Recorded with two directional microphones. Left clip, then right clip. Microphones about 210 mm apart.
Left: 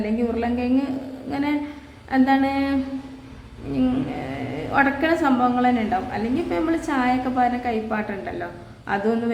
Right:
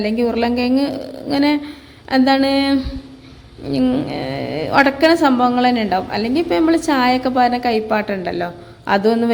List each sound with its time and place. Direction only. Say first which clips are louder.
0.0 s a woman's voice: right 7 dB; 40° right (ahead or behind)
3.8 s a woman's voice: right 5 dB; 30° right (ahead or behind)